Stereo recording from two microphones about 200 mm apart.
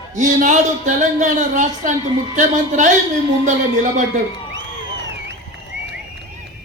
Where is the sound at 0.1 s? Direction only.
40° right (ahead or behind).